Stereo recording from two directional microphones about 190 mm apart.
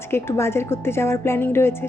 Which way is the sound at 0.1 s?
15° left (ahead or behind).